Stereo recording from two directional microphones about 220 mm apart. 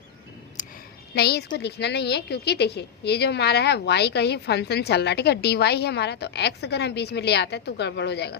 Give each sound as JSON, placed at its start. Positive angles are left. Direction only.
{"t": 1.1, "sound": "a woman's voice", "side_deg": 45}